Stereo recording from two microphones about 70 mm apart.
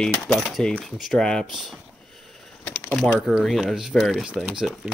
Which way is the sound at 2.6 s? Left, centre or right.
Centre.